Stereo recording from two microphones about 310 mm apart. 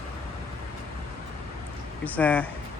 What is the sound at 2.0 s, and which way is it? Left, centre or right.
Speech, centre.